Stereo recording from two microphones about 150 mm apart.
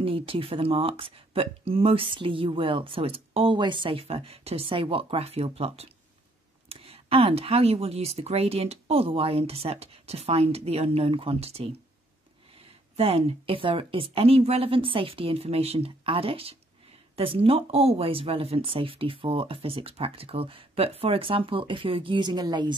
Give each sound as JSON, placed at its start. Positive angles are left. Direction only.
{"t": 0.0, "sound": "speech", "side_deg": -40}
{"t": 12.9, "sound": "speech", "side_deg": -40}